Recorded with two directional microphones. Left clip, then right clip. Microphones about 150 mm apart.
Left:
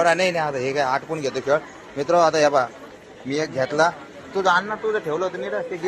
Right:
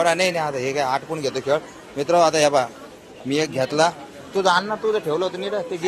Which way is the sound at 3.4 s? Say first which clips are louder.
Right 1 dB; 30° right (ahead or behind).